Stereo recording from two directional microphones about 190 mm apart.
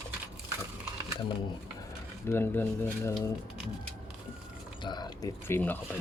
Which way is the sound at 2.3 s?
10° left (ahead or behind).